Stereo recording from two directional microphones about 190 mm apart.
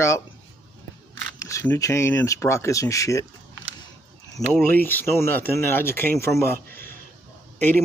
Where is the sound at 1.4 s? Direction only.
15° left (ahead or behind).